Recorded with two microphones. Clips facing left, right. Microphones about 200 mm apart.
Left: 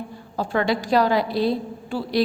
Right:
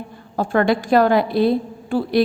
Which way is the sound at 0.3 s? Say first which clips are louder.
Right 5 dB; 50° right (ahead or behind).